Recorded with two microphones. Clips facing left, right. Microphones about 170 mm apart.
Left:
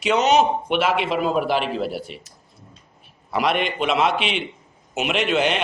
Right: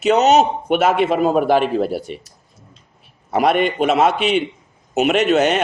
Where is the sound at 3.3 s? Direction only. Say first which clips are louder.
Right 6 dB; 50° right (ahead or behind).